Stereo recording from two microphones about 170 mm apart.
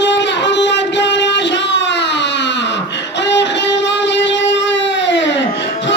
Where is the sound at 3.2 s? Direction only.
90° left.